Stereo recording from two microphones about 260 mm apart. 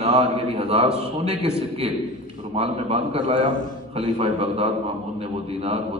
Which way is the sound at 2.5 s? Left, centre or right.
Right.